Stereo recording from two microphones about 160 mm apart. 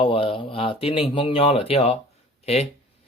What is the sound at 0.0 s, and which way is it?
Speech, 35° left (ahead or behind).